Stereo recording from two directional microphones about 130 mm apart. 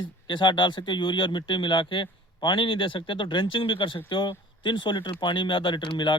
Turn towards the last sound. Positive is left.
turn(degrees=35)  # may be behind; listen again after turning